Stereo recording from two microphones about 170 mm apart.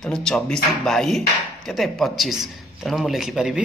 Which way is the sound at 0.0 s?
5° left (ahead or behind).